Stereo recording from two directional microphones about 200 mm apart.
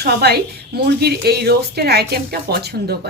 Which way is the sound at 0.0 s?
55° right (ahead or behind).